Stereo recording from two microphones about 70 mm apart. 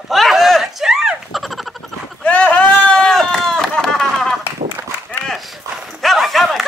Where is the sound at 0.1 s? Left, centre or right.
Centre.